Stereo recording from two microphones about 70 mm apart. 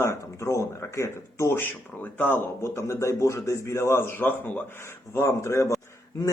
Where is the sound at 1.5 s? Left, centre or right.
Left.